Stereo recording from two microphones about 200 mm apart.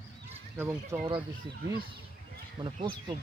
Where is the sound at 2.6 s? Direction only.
25° right (ahead or behind).